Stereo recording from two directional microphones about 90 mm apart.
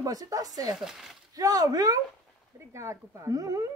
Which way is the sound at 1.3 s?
45° right (ahead or behind).